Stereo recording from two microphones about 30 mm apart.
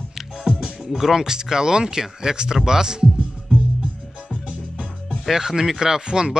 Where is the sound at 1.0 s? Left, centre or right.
Centre.